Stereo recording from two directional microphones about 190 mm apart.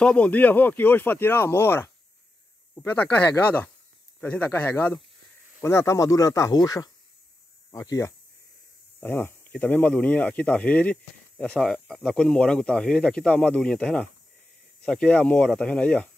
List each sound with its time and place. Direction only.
0.0 s speech: 5° left (ahead or behind)